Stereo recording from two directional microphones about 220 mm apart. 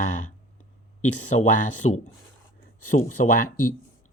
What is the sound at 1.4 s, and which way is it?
Speech, 30° left (ahead or behind).